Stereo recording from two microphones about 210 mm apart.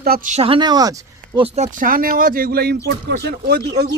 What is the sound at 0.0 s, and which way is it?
Speech, 45° right (ahead or behind).